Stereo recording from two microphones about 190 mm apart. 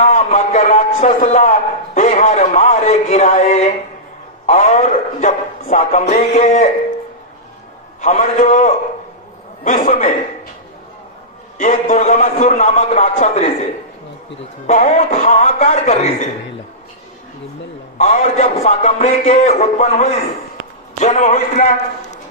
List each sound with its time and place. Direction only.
0.0 s a man's voice: 40° left (ahead or behind)
8.0 s a man's voice: 40° left (ahead or behind)
11.5 s a man's voice: 40° left (ahead or behind)
14.7 s a man's voice: 40° left (ahead or behind)
17.9 s a man's voice: 40° left (ahead or behind)